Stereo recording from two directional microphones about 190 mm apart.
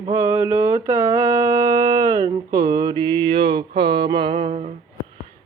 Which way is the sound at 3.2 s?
30° right (ahead or behind).